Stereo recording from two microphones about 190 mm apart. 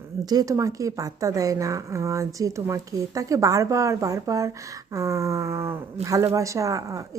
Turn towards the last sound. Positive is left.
turn(degrees=-15)  # may be behind; listen again after turning